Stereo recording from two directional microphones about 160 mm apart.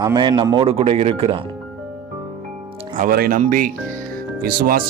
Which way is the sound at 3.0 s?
65° right (ahead or behind).